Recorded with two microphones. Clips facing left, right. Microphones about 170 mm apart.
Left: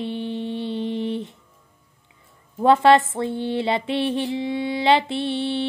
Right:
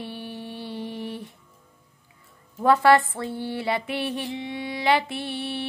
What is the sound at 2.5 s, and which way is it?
Music, 25° left (ahead or behind).